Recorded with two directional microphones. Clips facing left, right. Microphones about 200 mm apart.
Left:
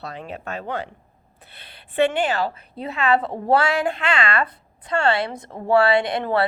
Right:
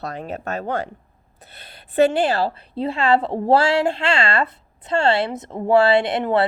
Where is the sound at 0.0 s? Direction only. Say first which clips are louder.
Right 4 dB; 45° right (ahead or behind).